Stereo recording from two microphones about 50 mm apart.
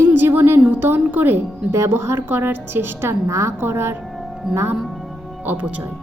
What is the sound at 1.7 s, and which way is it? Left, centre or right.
Speech, right.